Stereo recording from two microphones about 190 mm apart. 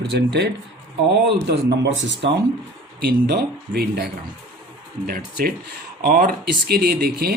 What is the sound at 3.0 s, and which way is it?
Speech, 55° right (ahead or behind).